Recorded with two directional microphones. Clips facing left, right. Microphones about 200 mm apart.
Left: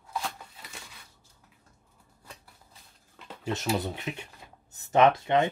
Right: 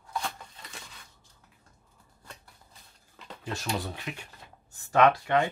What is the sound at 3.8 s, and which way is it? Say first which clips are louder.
Speech: left 3 dB; 20° left (ahead or behind).